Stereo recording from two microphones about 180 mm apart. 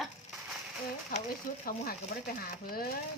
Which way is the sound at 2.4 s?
55° left (ahead or behind).